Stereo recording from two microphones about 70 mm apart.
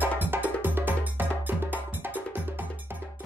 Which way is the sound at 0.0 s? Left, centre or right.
Right.